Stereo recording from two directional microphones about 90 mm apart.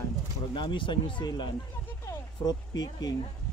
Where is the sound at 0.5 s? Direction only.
70° left (ahead or behind); by 3.1 s 50° left (ahead or behind).